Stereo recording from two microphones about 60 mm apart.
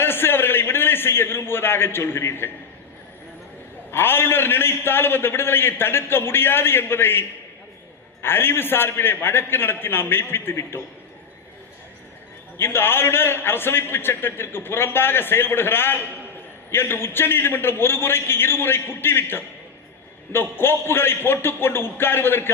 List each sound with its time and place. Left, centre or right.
0.0 s a sound: left
3.9 s a man's voice: left
12.5 s a man's voice: left